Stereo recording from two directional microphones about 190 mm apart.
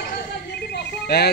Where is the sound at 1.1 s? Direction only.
60° left (ahead or behind).